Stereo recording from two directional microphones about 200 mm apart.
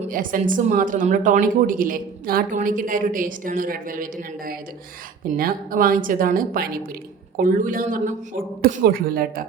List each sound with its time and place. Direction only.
0.0 s a woman's voice: 45° right (ahead or behind)